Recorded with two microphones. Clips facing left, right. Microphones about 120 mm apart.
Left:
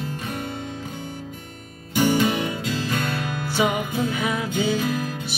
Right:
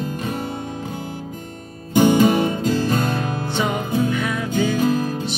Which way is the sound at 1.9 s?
45° right (ahead or behind).